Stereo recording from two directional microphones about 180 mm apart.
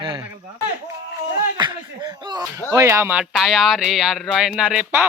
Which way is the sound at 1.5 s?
25° right (ahead or behind).